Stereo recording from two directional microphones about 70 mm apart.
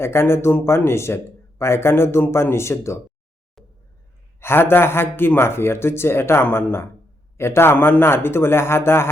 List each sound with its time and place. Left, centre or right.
0.0 s a man's voice: left
4.4 s a man's voice: left